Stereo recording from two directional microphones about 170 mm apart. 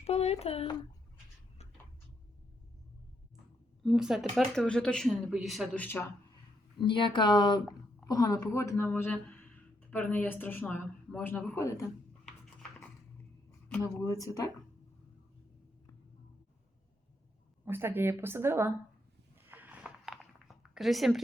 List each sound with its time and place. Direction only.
0.0 s speech: 40° left (ahead or behind)
3.8 s speech: 5° right (ahead or behind)
6.8 s a woman's voice: 30° left (ahead or behind); by 11.7 s 10° left (ahead or behind)
13.7 s speech: 15° left (ahead or behind)
17.7 s speech: 15° right (ahead or behind)
19.4 s a sound: 10° right (ahead or behind)